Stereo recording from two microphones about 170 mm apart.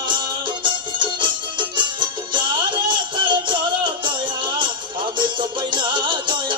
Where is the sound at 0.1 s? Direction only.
30° right (ahead or behind).